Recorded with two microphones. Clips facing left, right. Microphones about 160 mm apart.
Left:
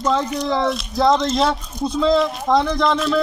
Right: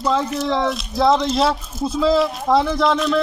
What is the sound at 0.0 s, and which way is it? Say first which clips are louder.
Speech: even; 5° right (ahead or behind).